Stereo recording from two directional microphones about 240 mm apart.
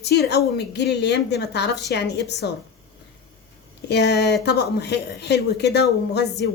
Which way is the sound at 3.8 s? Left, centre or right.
Left.